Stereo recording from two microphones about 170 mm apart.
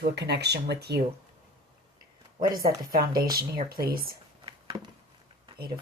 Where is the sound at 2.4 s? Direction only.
60° right (ahead or behind).